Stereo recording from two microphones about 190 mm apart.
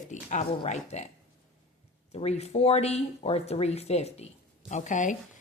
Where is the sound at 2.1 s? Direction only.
35° left (ahead or behind).